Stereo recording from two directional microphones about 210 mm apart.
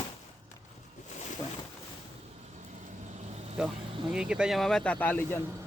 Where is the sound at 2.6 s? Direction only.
35° right (ahead or behind).